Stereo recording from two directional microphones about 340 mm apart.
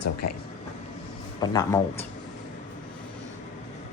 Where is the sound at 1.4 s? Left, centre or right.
Centre.